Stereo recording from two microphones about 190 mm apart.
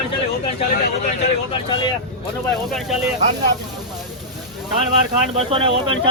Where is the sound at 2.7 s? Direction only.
Centre (ahead or behind).